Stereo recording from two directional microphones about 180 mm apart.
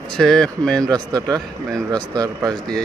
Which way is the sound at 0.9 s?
20° right (ahead or behind).